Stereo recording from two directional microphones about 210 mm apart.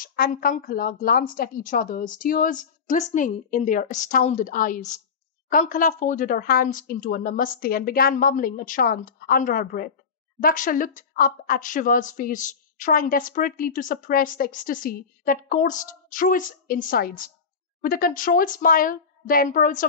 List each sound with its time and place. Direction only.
0.0 s a woman's voice: 45° left (ahead or behind)